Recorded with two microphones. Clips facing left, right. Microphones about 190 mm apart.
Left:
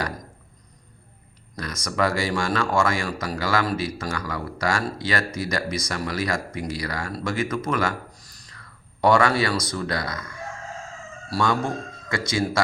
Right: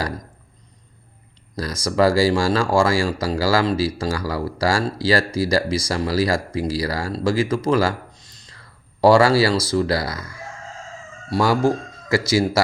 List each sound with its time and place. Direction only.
1.5 s speech: 30° right (ahead or behind)